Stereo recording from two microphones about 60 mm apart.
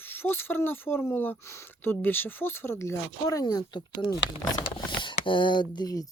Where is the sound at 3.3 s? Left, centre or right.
Left.